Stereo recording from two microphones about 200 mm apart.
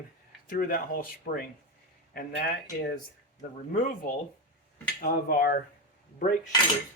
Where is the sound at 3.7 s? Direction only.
45° left (ahead or behind).